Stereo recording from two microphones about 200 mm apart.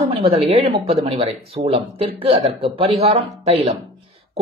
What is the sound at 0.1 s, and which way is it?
Speech, 25° right (ahead or behind).